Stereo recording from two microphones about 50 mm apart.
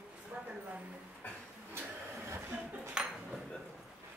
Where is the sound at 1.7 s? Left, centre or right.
Right.